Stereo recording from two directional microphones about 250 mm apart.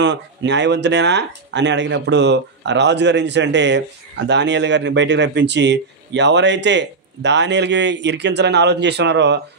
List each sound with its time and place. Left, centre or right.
0.0 s a man's voice: right